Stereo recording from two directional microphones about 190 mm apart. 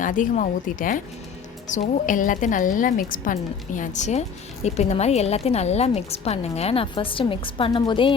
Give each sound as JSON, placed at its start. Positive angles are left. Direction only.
{"t": 0.0, "sound": "a woman's voice", "side_deg": 45}